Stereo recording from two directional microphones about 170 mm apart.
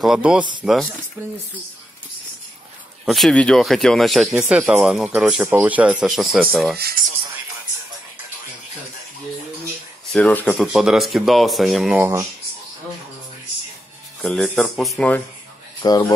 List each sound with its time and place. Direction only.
0.0 s speech: 5° right (ahead or behind)
0.4 s speech: 25° right (ahead or behind)
3.1 s speech: centre (ahead or behind)
10.1 s speech: 10° left (ahead or behind)
10.7 s speech: centre (ahead or behind)
12.0 s speech: 15° right (ahead or behind)
14.2 s speech: 5° left (ahead or behind)
15.8 s speech: 25° left (ahead or behind)